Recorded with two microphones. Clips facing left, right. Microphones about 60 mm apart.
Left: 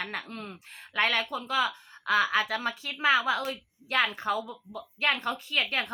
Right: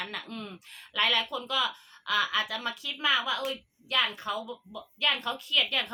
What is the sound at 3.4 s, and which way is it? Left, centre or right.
A woman's voice, left.